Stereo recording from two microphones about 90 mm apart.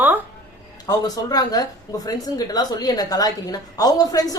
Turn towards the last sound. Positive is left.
turn(degrees=45)  # may be behind; listen again after turning